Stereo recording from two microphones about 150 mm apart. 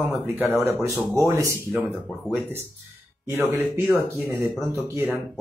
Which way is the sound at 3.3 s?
15° right (ahead or behind).